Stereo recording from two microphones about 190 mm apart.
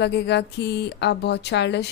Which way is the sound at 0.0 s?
65° left (ahead or behind).